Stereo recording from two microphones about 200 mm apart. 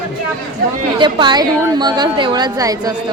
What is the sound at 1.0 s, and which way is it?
A woman's voice, 25° right (ahead or behind).